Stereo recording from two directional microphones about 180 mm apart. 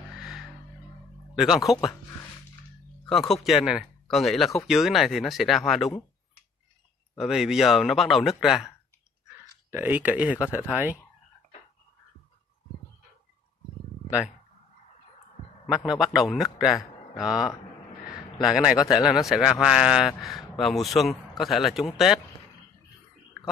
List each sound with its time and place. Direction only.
1.3 s speech: centre (ahead or behind)
3.1 s speech: centre (ahead or behind)
7.2 s speech: 5° right (ahead or behind)
9.7 s speech: 10° right (ahead or behind)
15.6 s speech: 5° right (ahead or behind)